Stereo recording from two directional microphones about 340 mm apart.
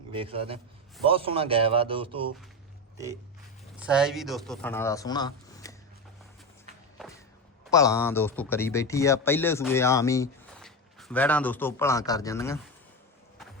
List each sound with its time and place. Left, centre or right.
0.1 s speech: centre
3.8 s speech: centre
7.7 s speech: centre